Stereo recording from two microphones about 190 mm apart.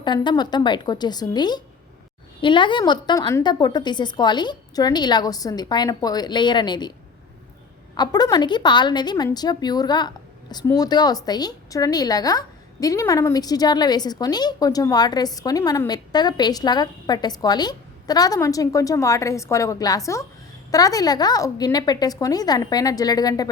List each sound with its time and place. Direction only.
0.0 s speech: 25° left (ahead or behind)
7.9 s speech: 20° left (ahead or behind)